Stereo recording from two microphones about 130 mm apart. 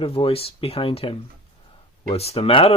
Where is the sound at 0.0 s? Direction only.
45° left (ahead or behind).